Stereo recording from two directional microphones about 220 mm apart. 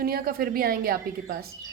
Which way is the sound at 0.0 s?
40° right (ahead or behind).